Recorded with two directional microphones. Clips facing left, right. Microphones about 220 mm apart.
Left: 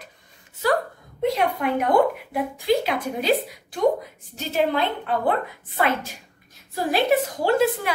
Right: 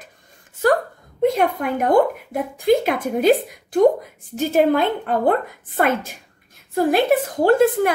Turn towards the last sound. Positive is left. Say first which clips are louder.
# right 5 dB
turn(degrees=-50)  # may be behind; listen again after turning